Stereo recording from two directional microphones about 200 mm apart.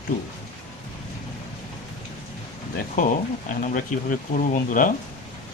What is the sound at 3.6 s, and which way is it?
Speech, 40° left (ahead or behind).